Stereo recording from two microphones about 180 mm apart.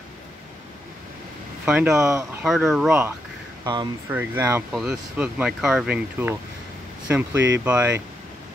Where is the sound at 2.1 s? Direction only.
15° right (ahead or behind).